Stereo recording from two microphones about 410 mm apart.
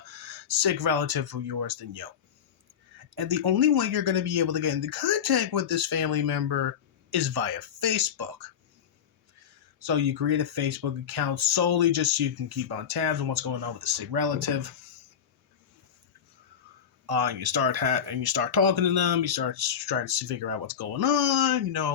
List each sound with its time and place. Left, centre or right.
0.0 s speech: right
3.2 s speech: right
9.8 s speech: right
17.1 s speech: right